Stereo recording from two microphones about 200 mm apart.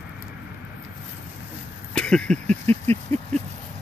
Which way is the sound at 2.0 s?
5° left (ahead or behind).